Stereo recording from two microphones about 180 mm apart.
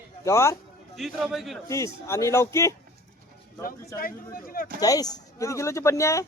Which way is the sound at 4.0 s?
55° left (ahead or behind).